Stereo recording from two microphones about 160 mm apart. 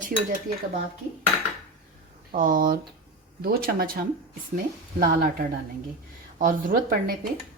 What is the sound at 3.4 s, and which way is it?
Speech, 70° right (ahead or behind).